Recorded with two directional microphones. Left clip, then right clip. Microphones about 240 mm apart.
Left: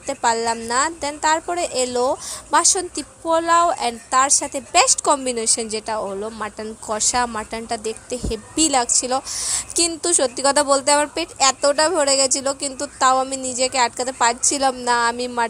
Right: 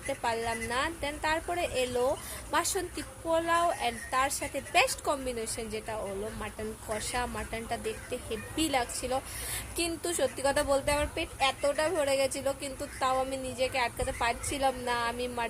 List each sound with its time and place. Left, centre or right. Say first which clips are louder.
0.1 s a woman's voice: left 12 dB; left